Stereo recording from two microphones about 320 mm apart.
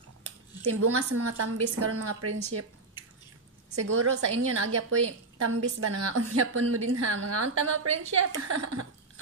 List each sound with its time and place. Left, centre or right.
0.7 s a woman's voice: right
3.8 s a woman's voice: right